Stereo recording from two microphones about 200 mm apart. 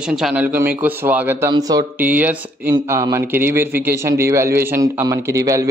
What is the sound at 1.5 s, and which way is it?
Speech, 20° right (ahead or behind).